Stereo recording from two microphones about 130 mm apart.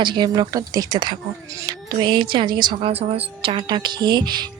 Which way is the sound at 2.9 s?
50° right (ahead or behind).